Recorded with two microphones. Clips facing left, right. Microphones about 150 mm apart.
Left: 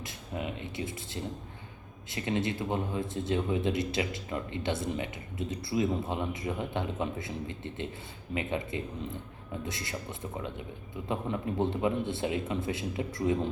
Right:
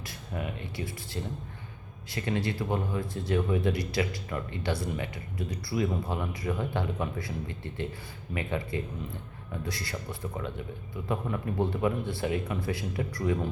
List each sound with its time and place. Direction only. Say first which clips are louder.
0.0 s speech: even; 20° left (ahead or behind)